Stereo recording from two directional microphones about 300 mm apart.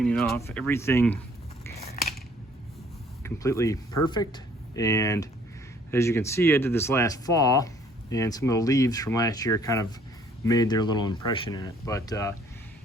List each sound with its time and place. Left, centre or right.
0.0 s speech: centre
1.9 s a sound: left
3.2 s speech: centre